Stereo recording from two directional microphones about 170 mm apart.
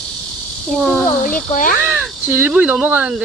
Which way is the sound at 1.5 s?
50° left (ahead or behind).